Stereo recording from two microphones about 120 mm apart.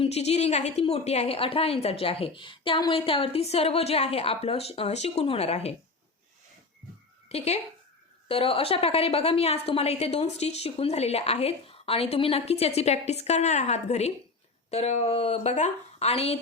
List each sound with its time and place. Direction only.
0.0 s a woman's voice: 60° left (ahead or behind)
7.3 s a woman's voice: 60° left (ahead or behind)